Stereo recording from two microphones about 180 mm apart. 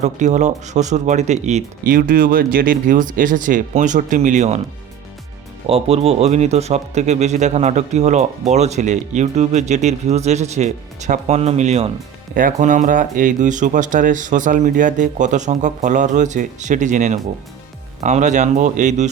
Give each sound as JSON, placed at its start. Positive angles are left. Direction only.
{"t": 0.0, "sound": "speech", "side_deg": -40}
{"t": 1.9, "sound": "speech", "side_deg": -55}
{"t": 5.6, "sound": "speech", "side_deg": -35}